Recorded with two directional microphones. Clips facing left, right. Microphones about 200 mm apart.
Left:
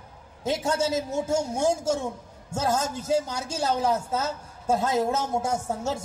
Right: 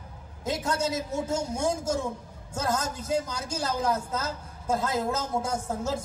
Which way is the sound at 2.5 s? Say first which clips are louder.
Left 3 dB; 25° left (ahead or behind).